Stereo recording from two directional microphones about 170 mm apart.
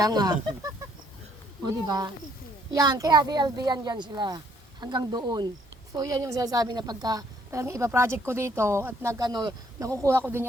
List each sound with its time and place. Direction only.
0.0 s a woman's voice: 25° right (ahead or behind)